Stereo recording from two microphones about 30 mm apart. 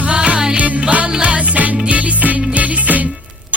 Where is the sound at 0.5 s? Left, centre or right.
Right.